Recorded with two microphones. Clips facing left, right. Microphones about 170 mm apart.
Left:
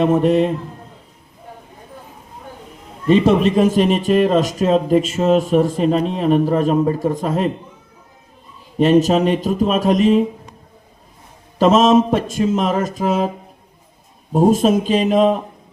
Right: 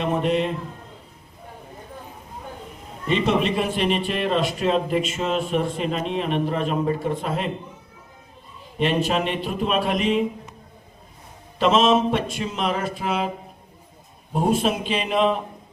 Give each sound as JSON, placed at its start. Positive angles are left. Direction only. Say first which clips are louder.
{"t": 0.0, "sound": "a man's voice", "louder": "left 8 dB", "side_deg": 45}
{"t": 3.1, "sound": "a man's voice", "louder": "left 8 dB", "side_deg": 40}
{"t": 8.8, "sound": "a man's voice", "louder": "left 9 dB", "side_deg": 40}
{"t": 11.6, "sound": "a man's voice", "louder": "left 6 dB", "side_deg": 45}
{"t": 14.3, "sound": "a man's voice", "louder": "left 8 dB", "side_deg": 40}